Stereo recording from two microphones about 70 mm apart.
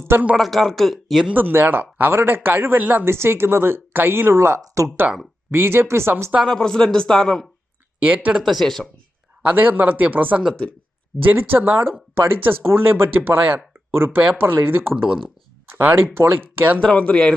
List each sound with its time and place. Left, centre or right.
0.1 s speech: right
0.3 s a man's voice: centre
1.3 s speech: right
4.6 s speech: right
5.5 s speech: right
6.5 s a man's voice: centre
8.1 s speech: right
8.4 s a man's voice: centre
9.5 s speech: right
10.5 s a man's voice: centre
11.3 s speech: right
16.1 s speech: right
16.7 s a man's voice: centre